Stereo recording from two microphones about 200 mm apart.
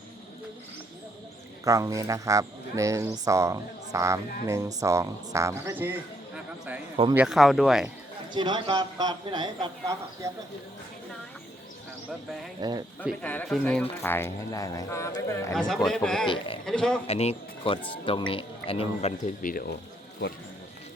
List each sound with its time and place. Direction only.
1.6 s speech: 15° right (ahead or behind); by 7.9 s centre (ahead or behind)
8.3 s speech: 25° right (ahead or behind)
12.6 s speech: 20° right (ahead or behind)
13.2 s speech: 5° left (ahead or behind)
15.5 s speech: centre (ahead or behind)
16.2 s speech: 25° left (ahead or behind)
16.6 s speech: 5° left (ahead or behind)
17.1 s speech: 30° left (ahead or behind); by 19.7 s 45° left (ahead or behind)